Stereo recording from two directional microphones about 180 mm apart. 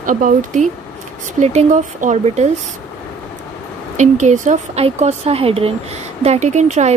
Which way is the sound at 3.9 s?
40° right (ahead or behind).